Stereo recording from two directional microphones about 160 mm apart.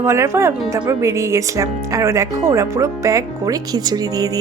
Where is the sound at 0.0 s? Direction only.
15° right (ahead or behind).